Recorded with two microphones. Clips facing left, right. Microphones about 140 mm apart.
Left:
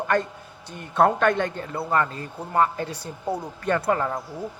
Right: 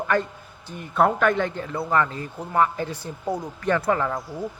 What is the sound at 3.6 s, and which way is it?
Speech, 35° left (ahead or behind).